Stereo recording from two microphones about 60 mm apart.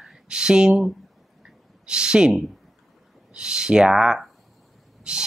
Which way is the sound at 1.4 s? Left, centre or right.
Centre.